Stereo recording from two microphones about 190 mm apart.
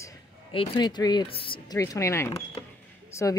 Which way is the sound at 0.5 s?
25° left (ahead or behind).